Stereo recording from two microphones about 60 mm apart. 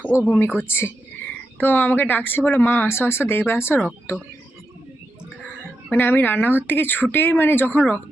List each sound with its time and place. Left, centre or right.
0.3 s speech: left
1.2 s speech: left
5.5 s a sound: left
6.6 s speech: left